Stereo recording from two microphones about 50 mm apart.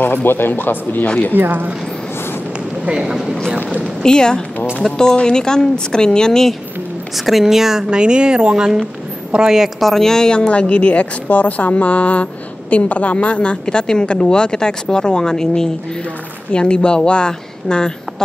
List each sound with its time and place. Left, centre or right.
0.0 s speech: left
1.3 s speech: right
2.8 s speech: centre
4.0 s speech: centre
7.2 s speech: centre
9.8 s speech: centre